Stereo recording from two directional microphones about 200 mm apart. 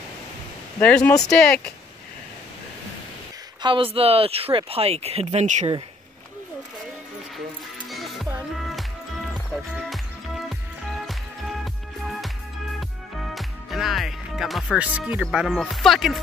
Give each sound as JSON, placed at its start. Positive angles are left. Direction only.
{"t": 0.7, "sound": "speech", "side_deg": 10}
{"t": 3.6, "sound": "speech", "side_deg": -25}
{"t": 7.9, "sound": "music", "side_deg": 0}
{"t": 11.6, "sound": "music", "side_deg": 0}
{"t": 13.1, "sound": "speech", "side_deg": 0}